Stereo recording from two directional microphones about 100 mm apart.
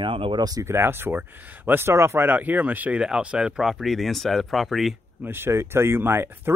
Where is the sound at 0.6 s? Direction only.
25° right (ahead or behind); by 4.9 s centre (ahead or behind).